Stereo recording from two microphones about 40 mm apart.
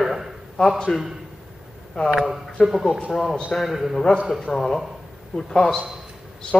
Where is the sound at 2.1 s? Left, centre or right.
Centre.